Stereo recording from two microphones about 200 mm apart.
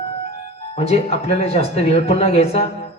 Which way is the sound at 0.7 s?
30° left (ahead or behind).